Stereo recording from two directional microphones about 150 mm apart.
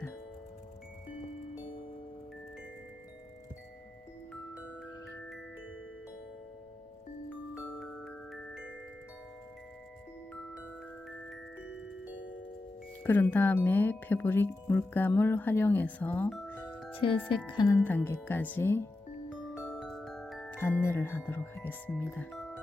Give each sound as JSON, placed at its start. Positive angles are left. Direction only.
{"t": 7.8, "sound": "glockenspiel", "side_deg": 5}
{"t": 13.0, "sound": "speech", "side_deg": 10}
{"t": 16.9, "sound": "speech", "side_deg": 35}
{"t": 17.2, "sound": "music", "side_deg": 35}
{"t": 17.8, "sound": "speech", "side_deg": 15}
{"t": 19.8, "sound": "marimba", "side_deg": 0}
{"t": 20.6, "sound": "speech", "side_deg": 15}
{"t": 22.3, "sound": "music", "side_deg": 5}